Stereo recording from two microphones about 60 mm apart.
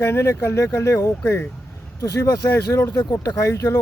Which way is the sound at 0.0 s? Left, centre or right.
Left.